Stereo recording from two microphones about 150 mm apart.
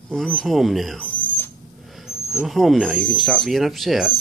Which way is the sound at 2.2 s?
15° left (ahead or behind).